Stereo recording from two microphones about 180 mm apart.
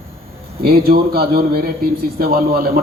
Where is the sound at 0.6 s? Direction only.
60° right (ahead or behind).